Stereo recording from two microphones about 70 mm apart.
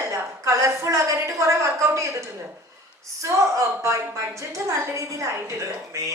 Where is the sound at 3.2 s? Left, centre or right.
Right.